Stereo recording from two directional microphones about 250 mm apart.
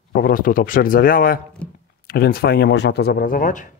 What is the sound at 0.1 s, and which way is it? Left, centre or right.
Speech, left.